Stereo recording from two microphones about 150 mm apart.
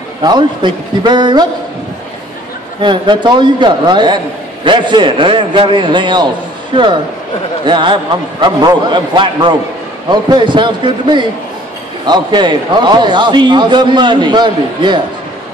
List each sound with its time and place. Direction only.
0.2 s a man's voice: 30° right (ahead or behind)
2.8 s a man's voice: 30° right (ahead or behind)